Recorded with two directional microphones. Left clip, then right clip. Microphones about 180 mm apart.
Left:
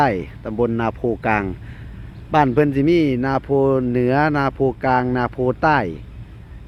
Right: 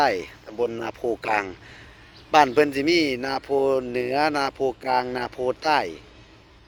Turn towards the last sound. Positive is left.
turn(degrees=20)  # may be behind; listen again after turning